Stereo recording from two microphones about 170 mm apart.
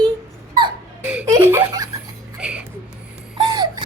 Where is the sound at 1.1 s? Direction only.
10° right (ahead or behind).